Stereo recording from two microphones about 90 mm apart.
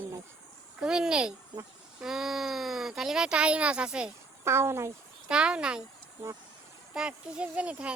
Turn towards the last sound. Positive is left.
turn(degrees=-15)  # may be behind; listen again after turning